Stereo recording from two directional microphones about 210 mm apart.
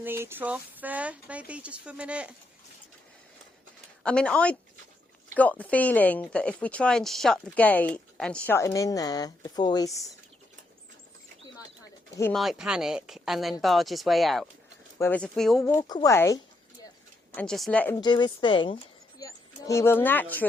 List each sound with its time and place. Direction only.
0.0 s speech: 10° right (ahead or behind)
4.0 s speech: 5° left (ahead or behind)
12.3 s speech: centre (ahead or behind)
15.5 s speech: 15° left (ahead or behind)
17.3 s speech: 5° left (ahead or behind)
17.9 s speech: 20° left (ahead or behind)